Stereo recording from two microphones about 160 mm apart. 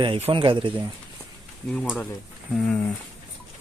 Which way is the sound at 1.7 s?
5° left (ahead or behind).